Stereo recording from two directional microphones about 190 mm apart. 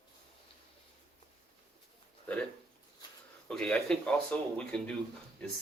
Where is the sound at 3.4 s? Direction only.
5° left (ahead or behind).